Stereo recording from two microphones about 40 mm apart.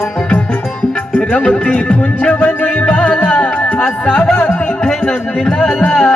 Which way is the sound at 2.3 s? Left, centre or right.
Left.